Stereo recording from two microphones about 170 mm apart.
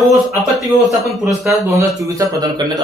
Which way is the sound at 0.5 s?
Centre (ahead or behind).